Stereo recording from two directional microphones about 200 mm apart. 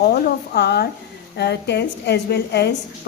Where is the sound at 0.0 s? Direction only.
55° left (ahead or behind).